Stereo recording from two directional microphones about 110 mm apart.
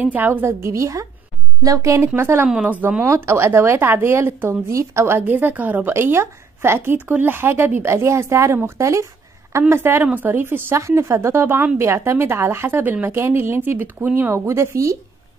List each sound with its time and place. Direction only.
0.0 s a woman's voice: 15° right (ahead or behind)
2.4 s a woman's voice: 10° right (ahead or behind)
14.3 s a woman's voice: 25° right (ahead or behind)